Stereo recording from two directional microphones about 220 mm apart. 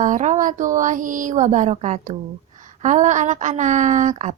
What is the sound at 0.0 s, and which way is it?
A woman's voice, 35° right (ahead or behind).